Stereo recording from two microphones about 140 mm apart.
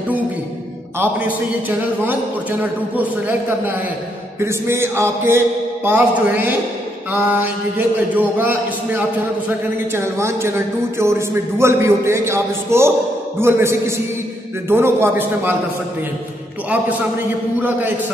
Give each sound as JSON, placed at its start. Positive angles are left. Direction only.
{"t": 0.9, "sound": "a man's voice", "side_deg": -15}
{"t": 17.6, "sound": "a man's voice", "side_deg": -10}